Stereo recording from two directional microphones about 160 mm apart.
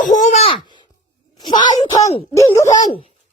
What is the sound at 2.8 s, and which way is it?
Speech, 35° left (ahead or behind).